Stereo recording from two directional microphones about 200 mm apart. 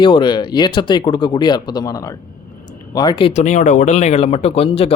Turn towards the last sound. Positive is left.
turn(degrees=30)  # may be behind; listen again after turning